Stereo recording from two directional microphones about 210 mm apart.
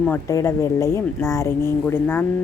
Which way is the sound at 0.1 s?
15° left (ahead or behind).